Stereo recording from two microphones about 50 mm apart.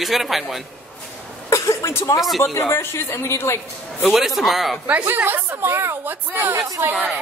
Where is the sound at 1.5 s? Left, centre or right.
Left.